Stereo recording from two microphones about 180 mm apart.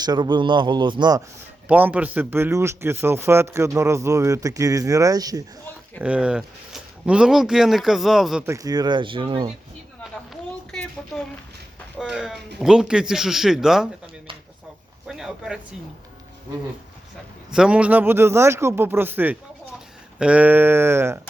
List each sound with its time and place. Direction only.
0.0 s a man's voice: 25° right (ahead or behind)
1.6 s speech: 10° right (ahead or behind)
6.0 s speech: 5° right (ahead or behind)
8.4 s a man's voice: 20° right (ahead or behind)
10.7 s a sound: 5° left (ahead or behind)
11.9 s speech: 5° right (ahead or behind)
15.0 s speech: 5° right (ahead or behind)
17.5 s speech: 5° right (ahead or behind)